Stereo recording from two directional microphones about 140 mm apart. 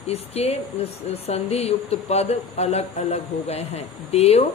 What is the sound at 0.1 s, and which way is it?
Speech, 45° left (ahead or behind).